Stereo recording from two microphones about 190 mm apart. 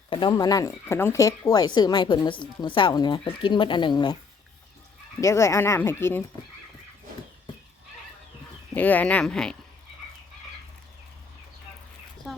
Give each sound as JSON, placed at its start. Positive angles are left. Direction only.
{"t": 0.1, "sound": "speech", "side_deg": 25}
{"t": 5.2, "sound": "speech", "side_deg": 15}
{"t": 8.7, "sound": "speech", "side_deg": 10}